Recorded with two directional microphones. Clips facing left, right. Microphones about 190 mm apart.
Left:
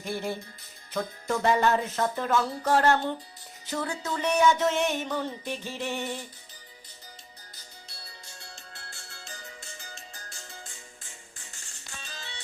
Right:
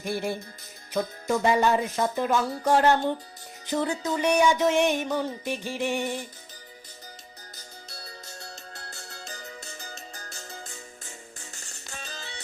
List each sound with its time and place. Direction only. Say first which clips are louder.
0.1 s music: right 2 dB; 10° right (ahead or behind)
7.5 s music: right 5 dB; 45° right (ahead or behind)